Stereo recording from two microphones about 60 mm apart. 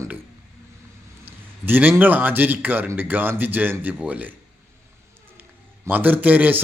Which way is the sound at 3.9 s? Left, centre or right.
Right.